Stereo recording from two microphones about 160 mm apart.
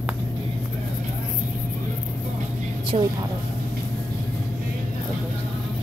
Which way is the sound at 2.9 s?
45° right (ahead or behind).